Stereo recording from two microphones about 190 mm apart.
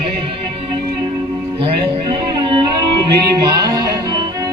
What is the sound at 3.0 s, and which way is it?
Music, 20° right (ahead or behind).